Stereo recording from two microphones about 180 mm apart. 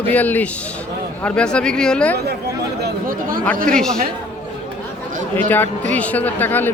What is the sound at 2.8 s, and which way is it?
Chatter, 50° right (ahead or behind).